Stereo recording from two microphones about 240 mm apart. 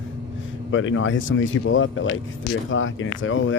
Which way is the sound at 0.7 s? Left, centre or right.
Left.